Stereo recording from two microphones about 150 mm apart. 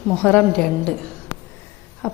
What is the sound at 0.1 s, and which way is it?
Speech, 10° left (ahead or behind).